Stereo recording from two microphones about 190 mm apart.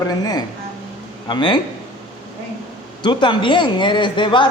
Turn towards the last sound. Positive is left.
turn(degrees=25)  # may be behind; listen again after turning